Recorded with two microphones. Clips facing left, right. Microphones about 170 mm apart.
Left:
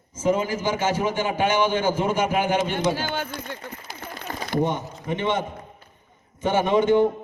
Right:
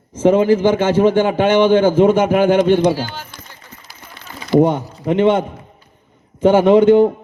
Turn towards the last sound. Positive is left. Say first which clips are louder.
# right 9 dB
turn(degrees=-60)  # may be behind; listen again after turning